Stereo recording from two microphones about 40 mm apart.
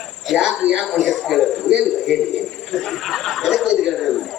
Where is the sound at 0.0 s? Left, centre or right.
Centre.